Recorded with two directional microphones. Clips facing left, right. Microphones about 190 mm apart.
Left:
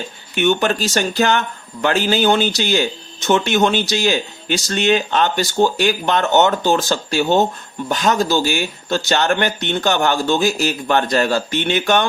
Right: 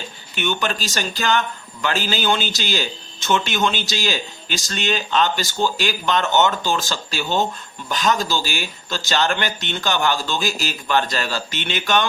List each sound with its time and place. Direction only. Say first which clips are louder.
0.3 s speech: left 7 dB; 50° left (ahead or behind)